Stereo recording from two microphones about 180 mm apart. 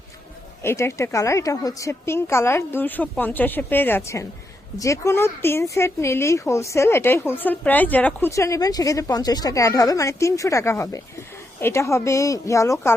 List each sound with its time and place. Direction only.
0.6 s speech: 15° left (ahead or behind)